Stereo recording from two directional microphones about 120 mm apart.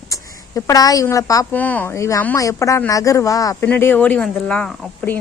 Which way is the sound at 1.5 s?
15° left (ahead or behind).